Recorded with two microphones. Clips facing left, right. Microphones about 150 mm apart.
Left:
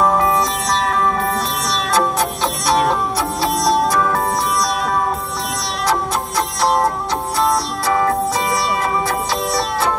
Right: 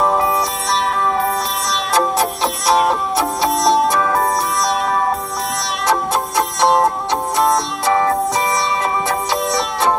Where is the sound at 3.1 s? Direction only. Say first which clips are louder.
Right 2 dB; 25° right (ahead or behind).